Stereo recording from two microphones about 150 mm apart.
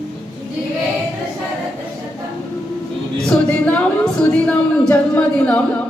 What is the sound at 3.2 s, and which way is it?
A woman's voice, 5° left (ahead or behind).